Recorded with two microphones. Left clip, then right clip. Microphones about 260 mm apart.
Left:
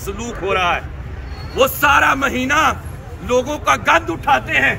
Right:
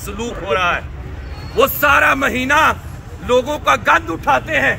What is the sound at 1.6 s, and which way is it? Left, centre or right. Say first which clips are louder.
Speech: right 1 dB; centre.